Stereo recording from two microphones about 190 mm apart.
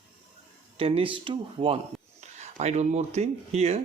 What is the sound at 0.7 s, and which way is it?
Speech, 30° right (ahead or behind).